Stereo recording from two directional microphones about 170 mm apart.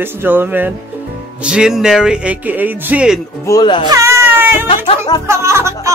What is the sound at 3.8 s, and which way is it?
Speech, 20° right (ahead or behind).